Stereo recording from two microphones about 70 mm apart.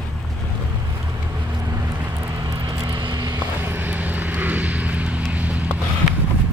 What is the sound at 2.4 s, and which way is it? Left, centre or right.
Vehicle, right.